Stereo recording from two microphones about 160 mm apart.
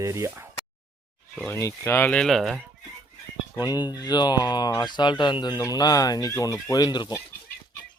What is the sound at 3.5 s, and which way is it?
Speech, 25° left (ahead or behind).